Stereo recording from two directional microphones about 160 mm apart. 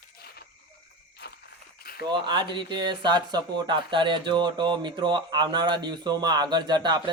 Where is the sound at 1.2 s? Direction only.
90° left.